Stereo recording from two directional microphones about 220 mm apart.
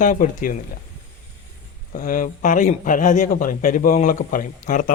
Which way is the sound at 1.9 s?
35° left (ahead or behind).